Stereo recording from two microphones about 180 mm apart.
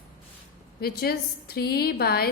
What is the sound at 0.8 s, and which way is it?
A woman's voice, 60° left (ahead or behind).